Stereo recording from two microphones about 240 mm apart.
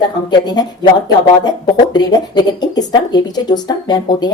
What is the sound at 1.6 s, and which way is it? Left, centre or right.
Speech, centre.